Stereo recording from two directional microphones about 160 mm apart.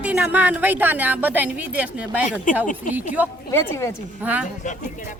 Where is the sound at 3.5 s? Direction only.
20° left (ahead or behind).